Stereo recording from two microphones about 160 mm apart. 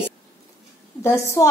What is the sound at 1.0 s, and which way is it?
Speech, 15° left (ahead or behind).